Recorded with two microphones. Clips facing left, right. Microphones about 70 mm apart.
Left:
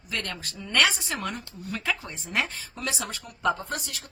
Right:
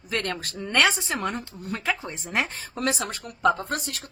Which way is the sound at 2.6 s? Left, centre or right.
Right.